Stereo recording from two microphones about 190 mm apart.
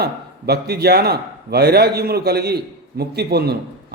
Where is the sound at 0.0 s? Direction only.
55° right (ahead or behind).